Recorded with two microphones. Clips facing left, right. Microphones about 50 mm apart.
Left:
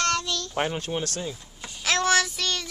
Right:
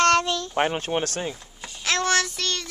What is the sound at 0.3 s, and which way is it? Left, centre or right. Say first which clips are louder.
Speech: right 4 dB; right.